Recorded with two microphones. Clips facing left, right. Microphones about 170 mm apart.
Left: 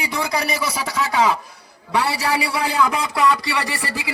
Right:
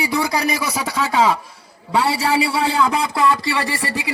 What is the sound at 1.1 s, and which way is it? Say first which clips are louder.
A man's voice: right 2 dB; 25° right (ahead or behind).